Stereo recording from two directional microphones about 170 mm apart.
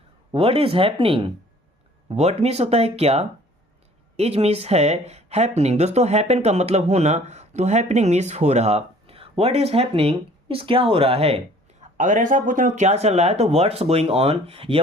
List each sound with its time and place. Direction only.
0.3 s a woman's voice: 35° right (ahead or behind)
11.8 s a woman's voice: 45° right (ahead or behind)